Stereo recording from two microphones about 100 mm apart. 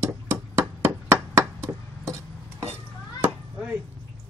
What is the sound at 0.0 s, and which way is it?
Hammer, 25° right (ahead or behind).